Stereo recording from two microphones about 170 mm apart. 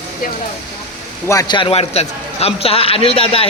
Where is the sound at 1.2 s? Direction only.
20° left (ahead or behind).